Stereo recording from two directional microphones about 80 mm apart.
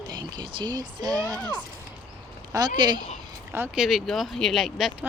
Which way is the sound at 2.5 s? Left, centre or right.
Right.